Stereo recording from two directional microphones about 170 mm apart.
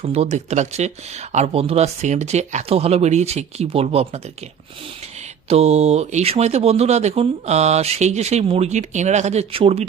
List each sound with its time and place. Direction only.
0.0 s speech: 35° right (ahead or behind)
5.5 s speech: 40° right (ahead or behind)